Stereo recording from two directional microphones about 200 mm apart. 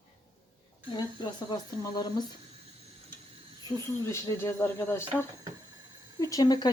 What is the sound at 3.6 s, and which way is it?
Speech, 15° left (ahead or behind).